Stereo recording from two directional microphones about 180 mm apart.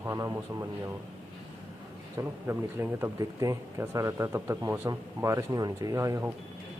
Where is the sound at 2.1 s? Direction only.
15° right (ahead or behind).